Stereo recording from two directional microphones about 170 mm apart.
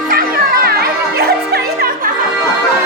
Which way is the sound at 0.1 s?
55° right (ahead or behind).